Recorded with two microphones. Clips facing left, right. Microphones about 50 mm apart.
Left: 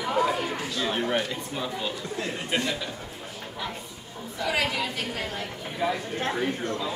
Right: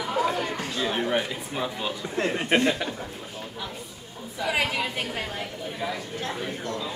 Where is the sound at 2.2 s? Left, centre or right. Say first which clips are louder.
Right 7 dB; right.